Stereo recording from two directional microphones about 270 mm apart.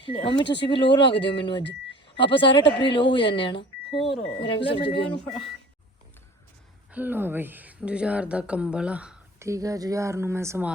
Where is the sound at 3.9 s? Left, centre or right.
Centre.